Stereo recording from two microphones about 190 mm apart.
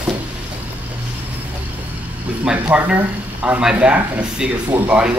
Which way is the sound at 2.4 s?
5° right (ahead or behind).